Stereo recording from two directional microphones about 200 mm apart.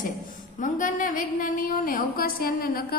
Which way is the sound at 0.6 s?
40° left (ahead or behind).